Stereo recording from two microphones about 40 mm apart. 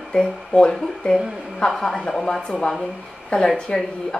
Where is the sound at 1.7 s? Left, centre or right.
Centre.